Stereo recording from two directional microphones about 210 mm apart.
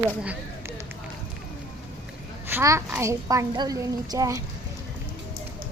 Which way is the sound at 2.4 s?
10° right (ahead or behind).